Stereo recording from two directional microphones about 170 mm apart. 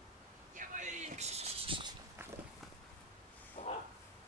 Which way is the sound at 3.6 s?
40° left (ahead or behind).